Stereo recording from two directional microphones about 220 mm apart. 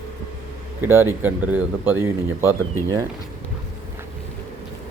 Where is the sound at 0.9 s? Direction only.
10° right (ahead or behind).